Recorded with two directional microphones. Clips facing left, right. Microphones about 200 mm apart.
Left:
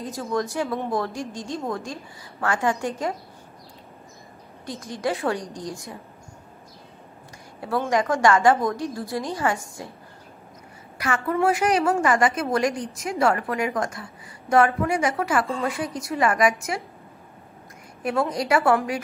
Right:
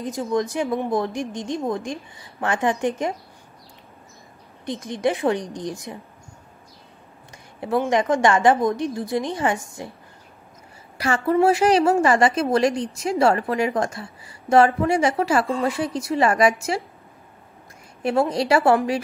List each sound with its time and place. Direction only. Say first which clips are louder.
0.0 s a woman's voice: right 3 dB; 20° right (ahead or behind)
4.6 s a woman's voice: right 4 dB; 20° right (ahead or behind)
7.6 s a woman's voice: right 3 dB; 20° right (ahead or behind)
11.0 s a woman's voice: right 4 dB; 30° right (ahead or behind)
18.0 s a woman's voice: right 4 dB; 30° right (ahead or behind)